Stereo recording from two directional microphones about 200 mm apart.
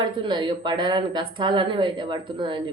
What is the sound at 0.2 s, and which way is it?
A woman's voice, 25° right (ahead or behind).